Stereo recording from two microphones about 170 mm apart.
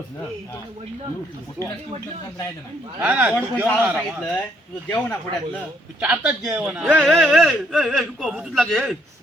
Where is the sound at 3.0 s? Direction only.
10° right (ahead or behind).